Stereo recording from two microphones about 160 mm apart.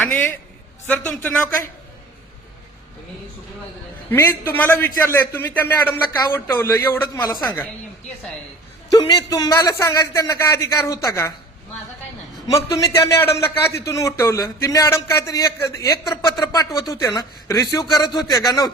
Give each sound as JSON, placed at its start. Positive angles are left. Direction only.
{"t": 0.9, "sound": "a man's voice", "side_deg": 10}
{"t": 4.1, "sound": "a man's voice", "side_deg": 15}
{"t": 9.0, "sound": "a man's voice", "side_deg": 35}
{"t": 9.3, "sound": "speech", "side_deg": 20}
{"t": 12.5, "sound": "speech", "side_deg": 20}